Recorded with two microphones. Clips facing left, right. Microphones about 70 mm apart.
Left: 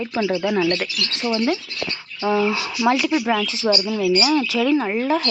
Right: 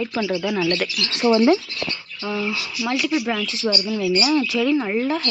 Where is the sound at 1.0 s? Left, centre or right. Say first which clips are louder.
Right 4 dB; centre.